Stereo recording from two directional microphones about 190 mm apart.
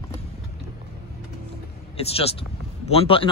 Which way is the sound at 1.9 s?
30° left (ahead or behind).